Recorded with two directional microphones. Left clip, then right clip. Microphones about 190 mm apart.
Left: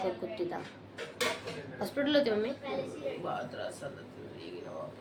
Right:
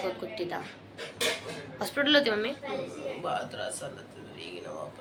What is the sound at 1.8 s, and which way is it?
Speech, 15° left (ahead or behind).